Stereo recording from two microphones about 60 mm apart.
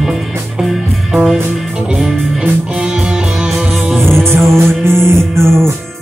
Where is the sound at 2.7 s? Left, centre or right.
Centre.